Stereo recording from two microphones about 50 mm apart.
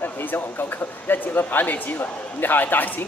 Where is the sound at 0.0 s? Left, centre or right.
Left.